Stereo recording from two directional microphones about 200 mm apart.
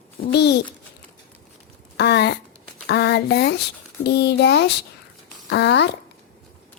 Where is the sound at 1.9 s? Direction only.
60° left (ahead or behind).